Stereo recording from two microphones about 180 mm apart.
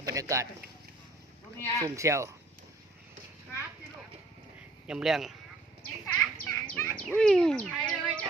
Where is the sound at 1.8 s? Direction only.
15° right (ahead or behind).